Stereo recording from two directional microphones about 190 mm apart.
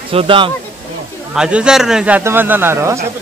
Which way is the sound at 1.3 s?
5° right (ahead or behind).